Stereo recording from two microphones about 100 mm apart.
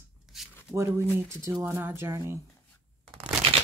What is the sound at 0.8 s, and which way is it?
Speech, 25° right (ahead or behind).